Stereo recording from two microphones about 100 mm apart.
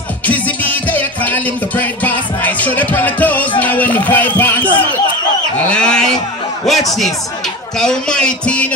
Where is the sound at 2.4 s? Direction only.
15° left (ahead or behind).